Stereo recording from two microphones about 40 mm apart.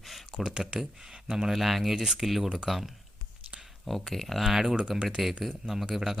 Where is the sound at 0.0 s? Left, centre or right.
Centre.